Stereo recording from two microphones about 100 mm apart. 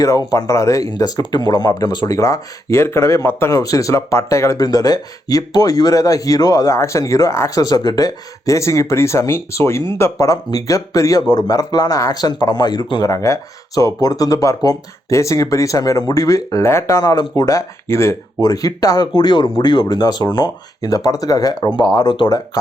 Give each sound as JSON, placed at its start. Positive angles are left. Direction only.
{"t": 0.3, "sound": "speech", "side_deg": 30}
{"t": 2.1, "sound": "speech", "side_deg": 30}
{"t": 13.1, "sound": "speech", "side_deg": 30}
{"t": 19.1, "sound": "speech", "side_deg": 50}
{"t": 20.9, "sound": "speech", "side_deg": 35}